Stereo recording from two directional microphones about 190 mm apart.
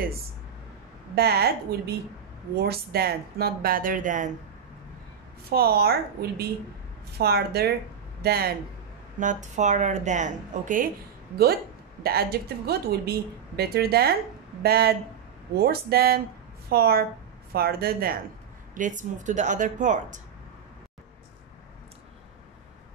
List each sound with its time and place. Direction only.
1.1 s a woman's voice: 55° right (ahead or behind)
5.5 s a woman's voice: 55° right (ahead or behind)
9.2 s speech: 40° right (ahead or behind)
12.0 s a woman's voice: 55° right (ahead or behind)
18.8 s speech: 40° right (ahead or behind)